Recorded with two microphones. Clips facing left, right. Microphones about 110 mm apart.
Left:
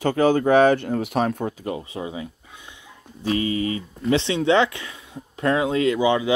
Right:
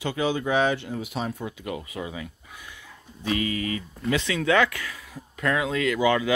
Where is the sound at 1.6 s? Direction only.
30° left (ahead or behind).